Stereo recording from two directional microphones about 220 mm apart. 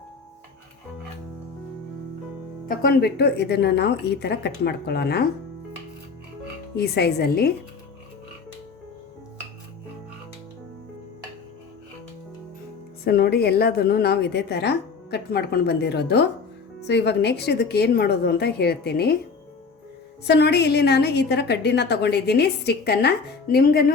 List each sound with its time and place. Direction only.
2.6 s a woman's voice: 45° left (ahead or behind)
6.7 s a woman's voice: 50° left (ahead or behind)
13.1 s a woman's voice: 45° left (ahead or behind)
20.2 s a woman's voice: 50° left (ahead or behind)